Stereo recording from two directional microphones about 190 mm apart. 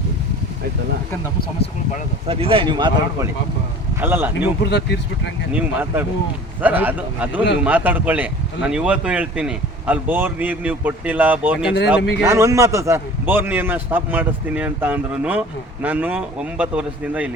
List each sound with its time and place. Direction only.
2.2 s speech: 30° right (ahead or behind)
4.0 s a man's voice: 10° right (ahead or behind)
4.6 s speech: 65° left (ahead or behind)
5.5 s a man's voice: 10° right (ahead or behind)